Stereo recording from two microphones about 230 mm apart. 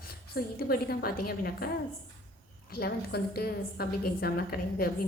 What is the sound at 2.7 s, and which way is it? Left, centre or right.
A woman's voice, left.